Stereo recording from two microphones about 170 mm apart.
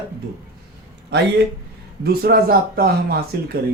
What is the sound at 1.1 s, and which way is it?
Speech, 80° right.